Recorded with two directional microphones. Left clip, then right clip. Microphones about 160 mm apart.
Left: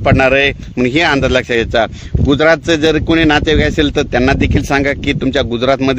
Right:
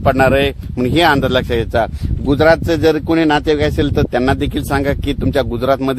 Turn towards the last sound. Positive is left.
turn(degrees=45)  # may be behind; listen again after turning